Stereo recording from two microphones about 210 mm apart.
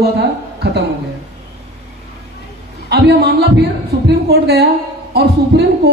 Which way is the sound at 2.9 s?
50° right (ahead or behind).